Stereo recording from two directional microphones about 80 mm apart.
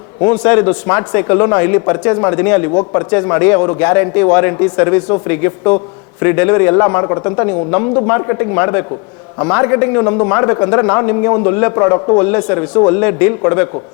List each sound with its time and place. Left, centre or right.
0.2 s a man's voice: centre
12.2 s a man's voice: centre